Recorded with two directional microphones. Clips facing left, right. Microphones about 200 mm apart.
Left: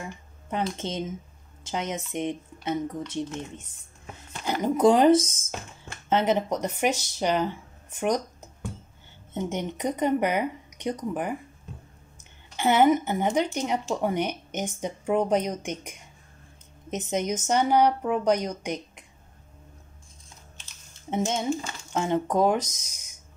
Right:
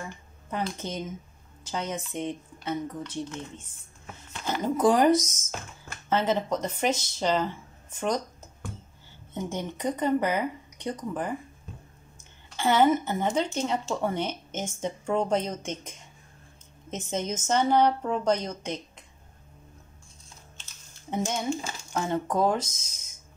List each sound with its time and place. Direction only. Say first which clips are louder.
0.0 s speech: left 1 dB; 20° left (ahead or behind)
21.1 s speech: left 2 dB; 20° left (ahead or behind)